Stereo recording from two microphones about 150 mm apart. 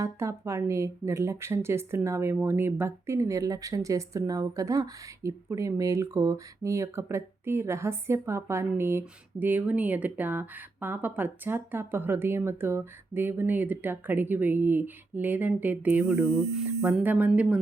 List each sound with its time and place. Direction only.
0.0 s speech: 20° right (ahead or behind)